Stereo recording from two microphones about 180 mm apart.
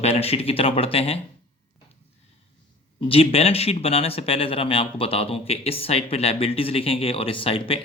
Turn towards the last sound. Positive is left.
turn(degrees=30)  # may be behind; listen again after turning